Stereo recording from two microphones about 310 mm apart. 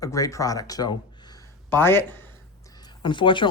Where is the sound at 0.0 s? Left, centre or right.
Centre.